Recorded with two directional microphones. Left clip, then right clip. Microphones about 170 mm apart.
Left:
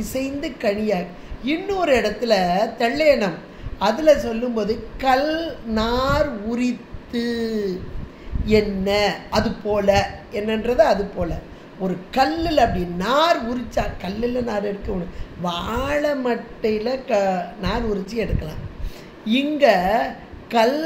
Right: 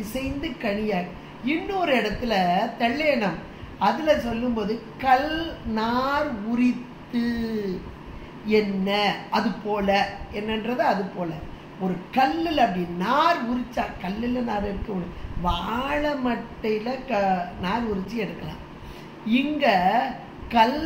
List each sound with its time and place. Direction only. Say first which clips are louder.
0.1 s a woman's voice: left 4 dB; 70° left (ahead or behind)
8.5 s a woman's voice: left 4 dB; 70° left (ahead or behind)